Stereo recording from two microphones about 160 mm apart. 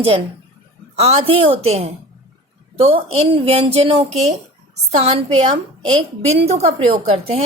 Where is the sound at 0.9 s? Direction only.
40° right (ahead or behind).